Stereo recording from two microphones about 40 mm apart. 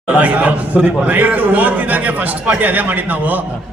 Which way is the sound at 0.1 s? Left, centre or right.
Right.